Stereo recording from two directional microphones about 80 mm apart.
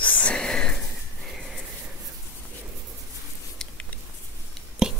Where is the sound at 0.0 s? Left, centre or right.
Centre.